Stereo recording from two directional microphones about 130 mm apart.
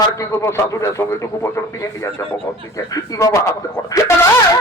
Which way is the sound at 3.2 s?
25° left (ahead or behind).